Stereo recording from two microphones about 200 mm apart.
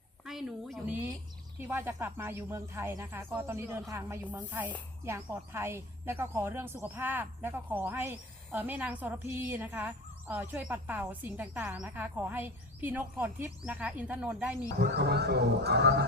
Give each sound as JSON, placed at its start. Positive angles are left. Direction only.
{"t": 0.3, "sound": "a woman's voice", "side_deg": 0}
{"t": 14.8, "sound": "speech", "side_deg": -55}